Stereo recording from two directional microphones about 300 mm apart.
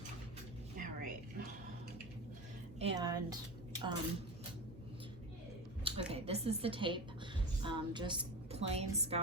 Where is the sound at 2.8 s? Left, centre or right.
Centre.